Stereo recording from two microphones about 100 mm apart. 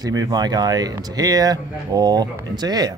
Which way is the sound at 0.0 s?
40° right (ahead or behind).